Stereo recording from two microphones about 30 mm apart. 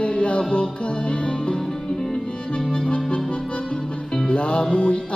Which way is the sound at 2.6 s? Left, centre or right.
Left.